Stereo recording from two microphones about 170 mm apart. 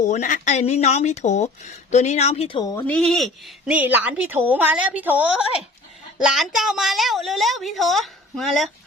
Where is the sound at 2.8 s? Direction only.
Centre (ahead or behind).